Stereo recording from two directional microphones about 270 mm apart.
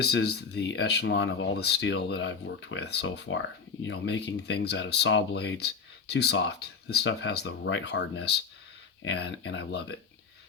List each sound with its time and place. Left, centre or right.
0.0 s speech: left